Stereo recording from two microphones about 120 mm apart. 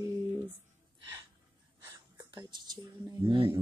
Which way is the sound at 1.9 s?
35° right (ahead or behind).